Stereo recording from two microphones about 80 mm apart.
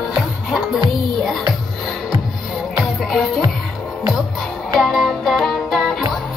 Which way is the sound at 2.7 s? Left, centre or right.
Centre.